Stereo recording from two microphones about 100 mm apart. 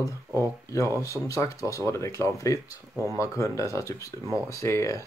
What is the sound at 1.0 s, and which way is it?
Speech, 30° left (ahead or behind).